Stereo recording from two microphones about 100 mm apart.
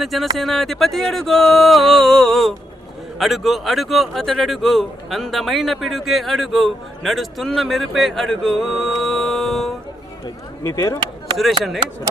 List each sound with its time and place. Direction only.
0.0 s speech: centre (ahead or behind)
10.6 s speech: 30° left (ahead or behind)